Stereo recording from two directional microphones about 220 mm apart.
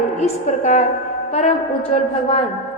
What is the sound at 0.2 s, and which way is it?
A woman's voice, 30° left (ahead or behind).